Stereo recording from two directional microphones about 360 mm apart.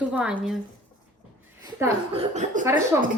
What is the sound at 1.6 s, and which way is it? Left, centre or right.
A woman's voice, centre.